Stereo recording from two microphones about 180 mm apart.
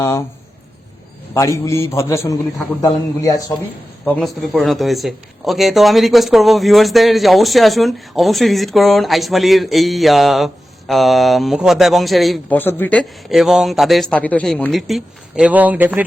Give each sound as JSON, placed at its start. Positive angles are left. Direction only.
{"t": 1.3, "sound": "a man's voice", "side_deg": 15}
{"t": 4.0, "sound": "speech", "side_deg": 5}
{"t": 12.5, "sound": "speech", "side_deg": 10}